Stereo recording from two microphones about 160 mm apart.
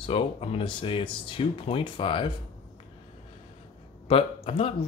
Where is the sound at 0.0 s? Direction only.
35° left (ahead or behind).